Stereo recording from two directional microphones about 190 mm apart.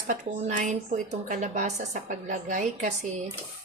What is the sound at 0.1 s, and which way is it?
A woman's voice, 40° right (ahead or behind).